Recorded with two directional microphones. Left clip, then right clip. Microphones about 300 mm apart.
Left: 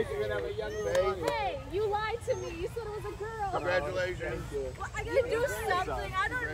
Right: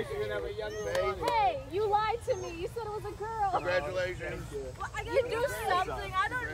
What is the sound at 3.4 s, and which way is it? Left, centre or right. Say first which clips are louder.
Speech: right 4 dB; centre.